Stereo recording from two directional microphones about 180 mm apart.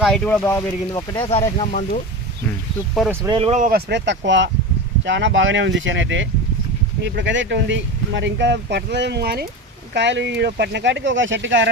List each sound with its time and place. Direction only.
0.0 s speech: 5° left (ahead or behind)
0.9 s speech: 25° left (ahead or behind)
3.0 s speech: centre (ahead or behind)
3.3 s speech: 30° right (ahead or behind)
3.6 s speech: 55° right (ahead or behind)
9.9 s speech: 75° right (ahead or behind)